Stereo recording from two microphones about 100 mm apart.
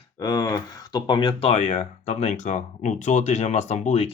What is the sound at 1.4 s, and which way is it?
Speech, 90° left.